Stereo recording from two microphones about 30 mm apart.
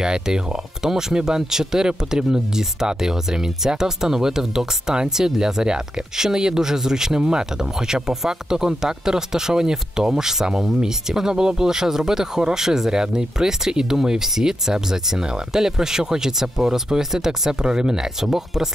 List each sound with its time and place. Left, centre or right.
0.0 s speech: right
7.2 s speech: right
7.9 s speech: centre
18.2 s speech: centre